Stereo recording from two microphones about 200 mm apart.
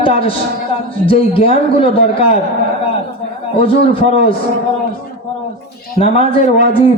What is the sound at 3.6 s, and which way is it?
Speech, 25° left (ahead or behind).